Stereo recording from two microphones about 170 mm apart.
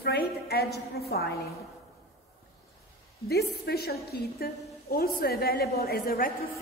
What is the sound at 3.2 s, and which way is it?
A woman's voice, 70° left (ahead or behind).